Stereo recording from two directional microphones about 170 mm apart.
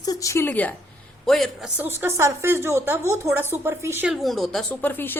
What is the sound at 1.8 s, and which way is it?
A woman's voice, 15° right (ahead or behind).